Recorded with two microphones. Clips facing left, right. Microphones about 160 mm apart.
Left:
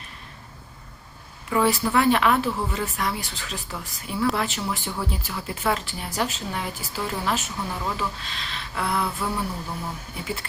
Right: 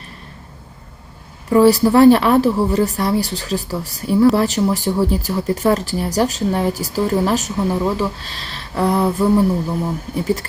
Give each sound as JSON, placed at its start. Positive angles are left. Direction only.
{"t": 1.5, "sound": "speech", "side_deg": -35}